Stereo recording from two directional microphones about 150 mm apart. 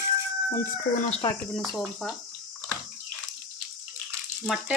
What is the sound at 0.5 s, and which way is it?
Speech, 60° left (ahead or behind).